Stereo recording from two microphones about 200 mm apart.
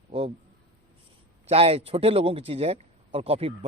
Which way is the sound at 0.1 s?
30° right (ahead or behind).